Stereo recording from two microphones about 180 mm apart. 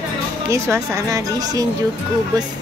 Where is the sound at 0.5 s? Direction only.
15° right (ahead or behind).